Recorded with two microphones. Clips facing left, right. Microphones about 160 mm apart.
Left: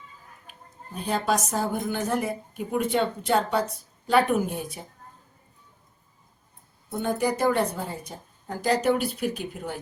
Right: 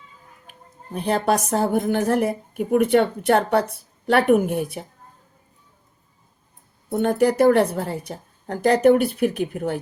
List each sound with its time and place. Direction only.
0.9 s a woman's voice: 60° right (ahead or behind)
6.9 s a woman's voice: 60° right (ahead or behind)